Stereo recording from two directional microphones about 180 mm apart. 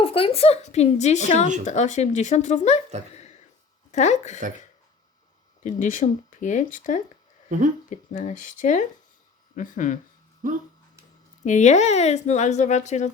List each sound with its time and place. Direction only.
0.0 s speech: 30° left (ahead or behind)
3.9 s speech: 40° left (ahead or behind)
5.6 s speech: 45° left (ahead or behind)
10.4 s speech: 45° right (ahead or behind)
11.4 s speech: 40° left (ahead or behind)